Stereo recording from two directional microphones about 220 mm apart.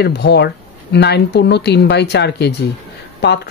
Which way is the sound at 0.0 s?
50° left (ahead or behind).